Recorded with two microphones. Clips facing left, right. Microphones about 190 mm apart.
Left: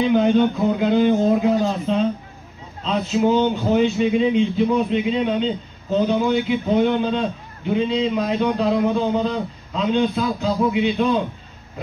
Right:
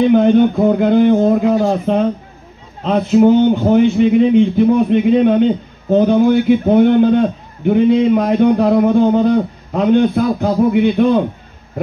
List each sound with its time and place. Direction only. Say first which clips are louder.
0.0 s speech: right 6 dB; 55° right (ahead or behind)